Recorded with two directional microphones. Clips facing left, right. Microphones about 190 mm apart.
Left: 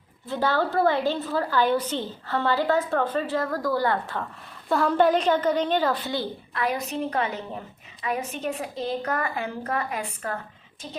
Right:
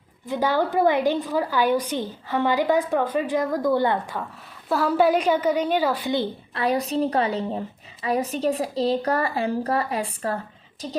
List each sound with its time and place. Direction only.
0.3 s a woman's voice: 15° right (ahead or behind)
6.5 s a woman's voice: 30° right (ahead or behind)